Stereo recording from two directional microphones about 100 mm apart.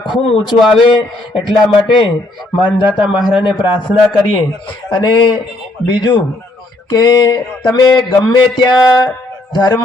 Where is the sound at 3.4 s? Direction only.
15° right (ahead or behind).